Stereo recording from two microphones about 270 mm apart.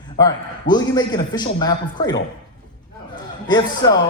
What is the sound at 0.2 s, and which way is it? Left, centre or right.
A man's voice, centre.